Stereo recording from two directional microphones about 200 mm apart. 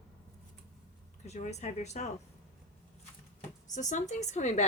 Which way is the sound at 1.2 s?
35° left (ahead or behind).